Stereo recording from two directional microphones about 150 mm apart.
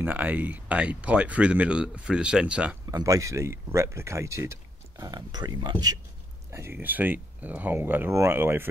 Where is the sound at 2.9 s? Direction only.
20° right (ahead or behind).